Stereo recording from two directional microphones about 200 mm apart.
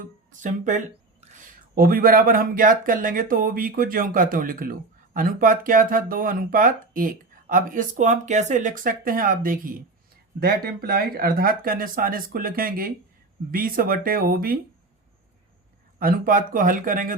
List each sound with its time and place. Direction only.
0.0 s speech: 40° right (ahead or behind)
16.0 s speech: 45° right (ahead or behind)